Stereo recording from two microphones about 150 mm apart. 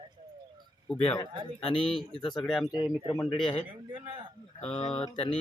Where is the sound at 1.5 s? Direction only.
35° left (ahead or behind).